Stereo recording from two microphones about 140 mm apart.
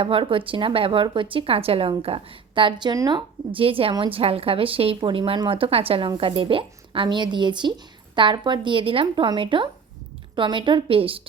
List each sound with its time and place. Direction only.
0.0 s speech: 40° right (ahead or behind)